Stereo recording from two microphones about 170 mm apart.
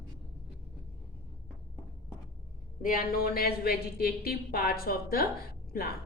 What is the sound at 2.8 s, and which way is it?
A woman's voice, 55° left (ahead or behind).